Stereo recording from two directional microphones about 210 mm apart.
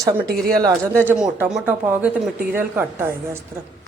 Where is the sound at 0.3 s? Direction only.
45° right (ahead or behind).